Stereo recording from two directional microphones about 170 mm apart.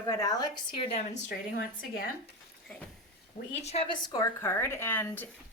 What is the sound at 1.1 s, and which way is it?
Speech, 75° left (ahead or behind).